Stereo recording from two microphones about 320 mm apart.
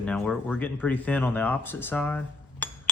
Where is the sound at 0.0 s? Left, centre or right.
Centre.